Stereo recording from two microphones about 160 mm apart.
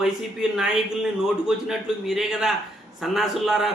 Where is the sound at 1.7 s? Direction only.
5° right (ahead or behind).